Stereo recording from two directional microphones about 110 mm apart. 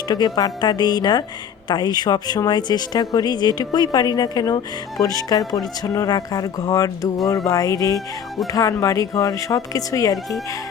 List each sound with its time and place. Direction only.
0.1 s a woman's voice: 40° left (ahead or behind)